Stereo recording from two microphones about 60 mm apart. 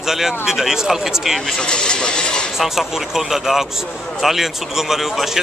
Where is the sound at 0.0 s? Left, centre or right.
Centre.